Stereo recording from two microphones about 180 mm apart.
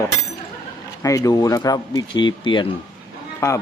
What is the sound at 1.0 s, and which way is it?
Speech, 20° left (ahead or behind).